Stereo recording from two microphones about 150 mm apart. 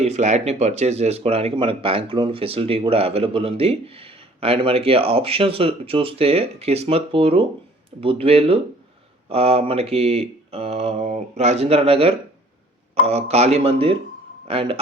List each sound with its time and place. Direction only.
0.0 s speech: 50° right (ahead or behind)